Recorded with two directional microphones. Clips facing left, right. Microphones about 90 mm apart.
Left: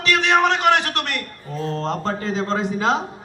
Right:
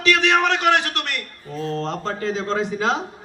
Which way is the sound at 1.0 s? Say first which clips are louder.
Left 2 dB; 50° left (ahead or behind).